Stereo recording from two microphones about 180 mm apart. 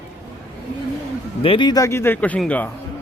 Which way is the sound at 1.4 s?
30° left (ahead or behind).